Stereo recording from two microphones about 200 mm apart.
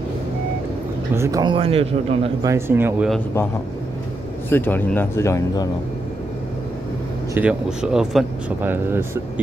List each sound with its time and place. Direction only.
1.1 s a man's voice: 15° right (ahead or behind)
2.4 s speech: 10° right (ahead or behind)
4.5 s speech: 10° left (ahead or behind)
7.3 s speech: 5° right (ahead or behind)